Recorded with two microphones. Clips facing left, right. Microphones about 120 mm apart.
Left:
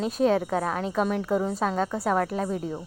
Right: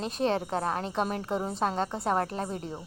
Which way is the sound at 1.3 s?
25° right (ahead or behind).